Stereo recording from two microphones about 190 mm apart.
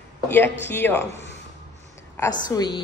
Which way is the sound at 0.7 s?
10° left (ahead or behind).